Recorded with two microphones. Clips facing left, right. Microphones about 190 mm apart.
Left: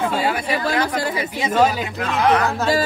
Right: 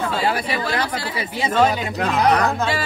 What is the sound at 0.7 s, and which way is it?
Speech, 45° left (ahead or behind).